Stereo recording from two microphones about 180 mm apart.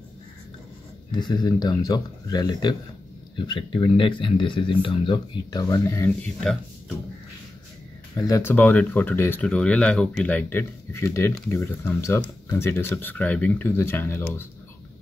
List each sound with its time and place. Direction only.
1.1 s speech: 25° left (ahead or behind)
8.2 s speech: 15° left (ahead or behind)